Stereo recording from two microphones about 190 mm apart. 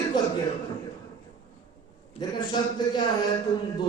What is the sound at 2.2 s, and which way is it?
Speech, 20° left (ahead or behind).